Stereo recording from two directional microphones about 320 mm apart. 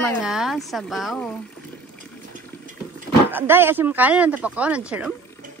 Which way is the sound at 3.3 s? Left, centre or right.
Centre.